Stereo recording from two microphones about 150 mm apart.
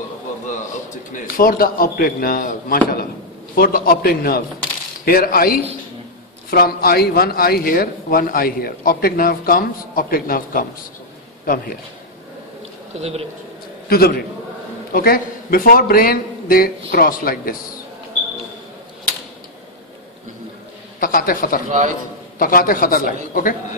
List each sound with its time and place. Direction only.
1.1 s speech: 75° left (ahead or behind)
6.5 s speech: 90° left; by 11.7 s 70° left (ahead or behind)
13.0 s speech: 40° right (ahead or behind)
13.8 s a man's voice: 90° left
14.9 s a man's voice: 75° left (ahead or behind)
21.0 s speech: 70° left (ahead or behind)
21.6 s a man's voice: 55° right (ahead or behind)
22.4 s speech: 70° left (ahead or behind)